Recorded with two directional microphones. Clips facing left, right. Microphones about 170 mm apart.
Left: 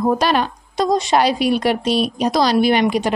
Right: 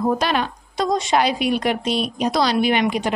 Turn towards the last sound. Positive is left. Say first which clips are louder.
# left 3 dB
turn(degrees=40)  # may be behind; listen again after turning